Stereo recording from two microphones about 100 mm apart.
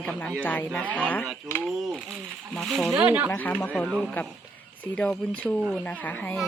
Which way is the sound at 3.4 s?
15° left (ahead or behind).